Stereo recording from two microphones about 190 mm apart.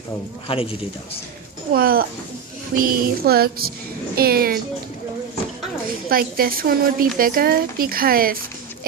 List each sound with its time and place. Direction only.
0.4 s a man's voice: 30° left (ahead or behind)
1.7 s speech: 50° right (ahead or behind)
6.1 s speech: 50° right (ahead or behind)